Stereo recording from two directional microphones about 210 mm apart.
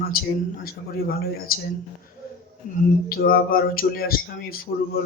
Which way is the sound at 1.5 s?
45° left (ahead or behind).